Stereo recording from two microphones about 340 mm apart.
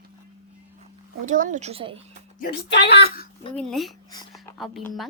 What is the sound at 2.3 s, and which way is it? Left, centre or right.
Speech, left.